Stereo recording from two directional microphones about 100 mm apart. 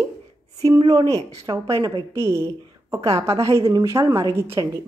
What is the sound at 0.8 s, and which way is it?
A woman's voice, 35° right (ahead or behind).